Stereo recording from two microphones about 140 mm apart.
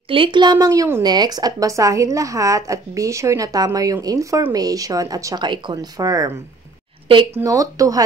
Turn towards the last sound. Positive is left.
turn(degrees=-25)  # may be behind; listen again after turning